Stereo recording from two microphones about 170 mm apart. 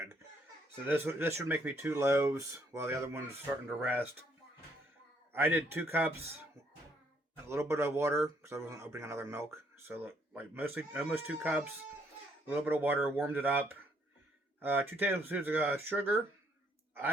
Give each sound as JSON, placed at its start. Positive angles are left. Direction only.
{"t": 0.9, "sound": "speech", "side_deg": -15}
{"t": 5.3, "sound": "speech", "side_deg": -15}
{"t": 7.4, "sound": "speech", "side_deg": -15}